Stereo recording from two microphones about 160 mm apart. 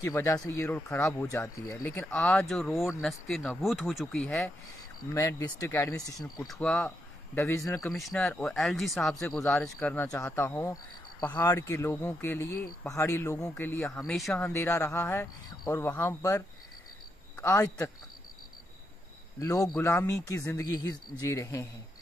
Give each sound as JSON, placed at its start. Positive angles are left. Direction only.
{"t": 0.0, "sound": "speech", "side_deg": 20}
{"t": 5.1, "sound": "speech", "side_deg": 20}
{"t": 6.4, "sound": "speech", "side_deg": 5}
{"t": 7.3, "sound": "speech", "side_deg": 20}
{"t": 7.9, "sound": "speech", "side_deg": 0}
{"t": 14.0, "sound": "speech", "side_deg": 0}
{"t": 14.5, "sound": "speech", "side_deg": 15}
{"t": 19.4, "sound": "speech", "side_deg": 20}